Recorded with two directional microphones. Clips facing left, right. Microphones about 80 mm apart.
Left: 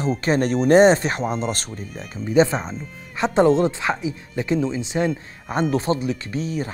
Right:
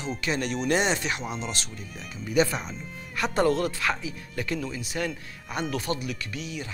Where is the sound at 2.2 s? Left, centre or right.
Left.